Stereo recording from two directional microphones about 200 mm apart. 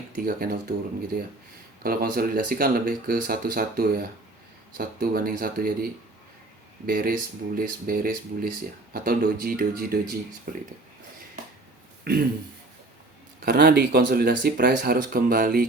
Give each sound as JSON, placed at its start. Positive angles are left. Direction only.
{"t": 0.2, "sound": "speech", "side_deg": -50}
{"t": 12.1, "sound": "speech", "side_deg": -50}
{"t": 13.4, "sound": "speech", "side_deg": -50}